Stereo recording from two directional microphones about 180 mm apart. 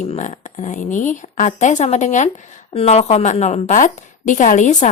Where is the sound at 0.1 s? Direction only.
40° left (ahead or behind).